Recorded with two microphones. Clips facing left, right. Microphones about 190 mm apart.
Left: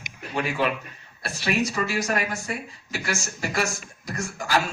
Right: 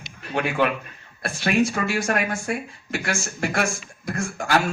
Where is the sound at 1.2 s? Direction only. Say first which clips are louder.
Right 4 dB; 55° right (ahead or behind).